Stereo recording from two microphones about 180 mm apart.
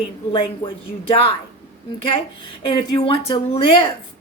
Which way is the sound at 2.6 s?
30° left (ahead or behind).